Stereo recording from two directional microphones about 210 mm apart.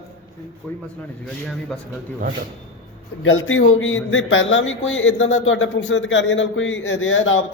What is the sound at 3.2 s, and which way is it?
Speech, 65° left (ahead or behind).